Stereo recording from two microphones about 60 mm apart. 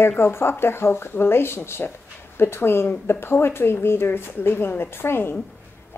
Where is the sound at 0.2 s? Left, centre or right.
Left.